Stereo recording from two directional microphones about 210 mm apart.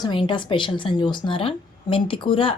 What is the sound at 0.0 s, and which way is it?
A woman's voice, 25° left (ahead or behind).